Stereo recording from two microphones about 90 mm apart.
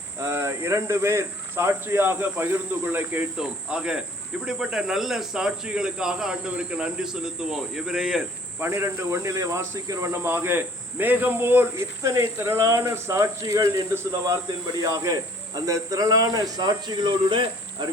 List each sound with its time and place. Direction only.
0.2 s speech: 30° right (ahead or behind)
3.3 s speech: 10° right (ahead or behind)
8.5 s speech: 25° right (ahead or behind); by 13.8 s 40° right (ahead or behind)
13.9 s speech: 25° right (ahead or behind)
14.8 s speech: 40° right (ahead or behind); by 17.4 s 60° right (ahead or behind)